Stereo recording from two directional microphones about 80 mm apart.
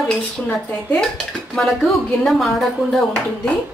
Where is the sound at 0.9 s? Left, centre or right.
Centre.